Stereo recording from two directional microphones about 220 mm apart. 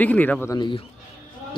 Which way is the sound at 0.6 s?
20° left (ahead or behind).